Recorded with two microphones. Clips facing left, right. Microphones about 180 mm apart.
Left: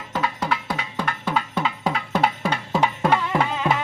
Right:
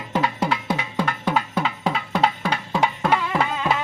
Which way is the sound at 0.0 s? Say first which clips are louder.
Right 3 dB; 20° right (ahead or behind).